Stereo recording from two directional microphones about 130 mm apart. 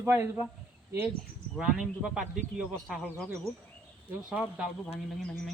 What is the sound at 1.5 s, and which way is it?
A man's voice, 5° right (ahead or behind).